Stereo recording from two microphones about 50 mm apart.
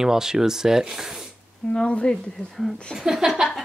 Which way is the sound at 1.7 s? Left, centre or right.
Left.